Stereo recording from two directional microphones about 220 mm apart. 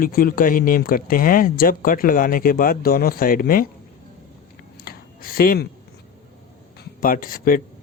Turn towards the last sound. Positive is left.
turn(degrees=40)  # may be behind; listen again after turning